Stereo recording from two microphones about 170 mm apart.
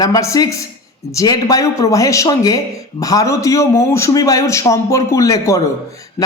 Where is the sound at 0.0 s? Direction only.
20° left (ahead or behind).